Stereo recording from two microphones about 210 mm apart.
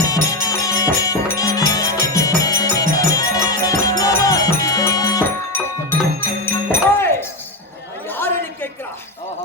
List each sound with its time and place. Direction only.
0.0 s music: 15° left (ahead or behind)